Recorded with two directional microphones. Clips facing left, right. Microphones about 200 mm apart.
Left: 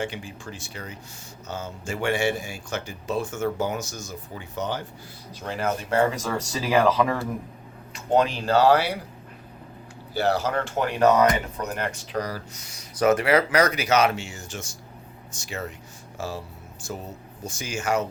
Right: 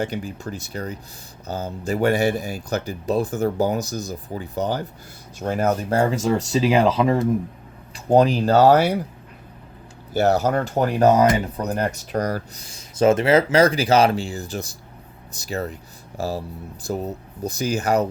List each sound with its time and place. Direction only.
0.0 s speech: 40° right (ahead or behind)
10.2 s speech: 45° right (ahead or behind)
12.5 s speech: 30° right (ahead or behind)